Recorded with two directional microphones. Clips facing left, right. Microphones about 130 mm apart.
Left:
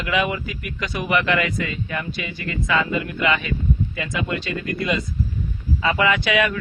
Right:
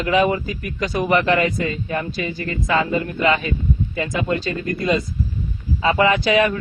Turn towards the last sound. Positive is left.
turn(degrees=-35)  # may be behind; listen again after turning